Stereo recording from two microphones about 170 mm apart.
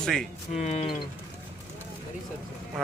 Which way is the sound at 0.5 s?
40° left (ahead or behind).